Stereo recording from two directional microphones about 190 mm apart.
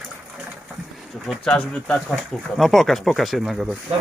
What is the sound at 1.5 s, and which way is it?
Speech, 5° left (ahead or behind).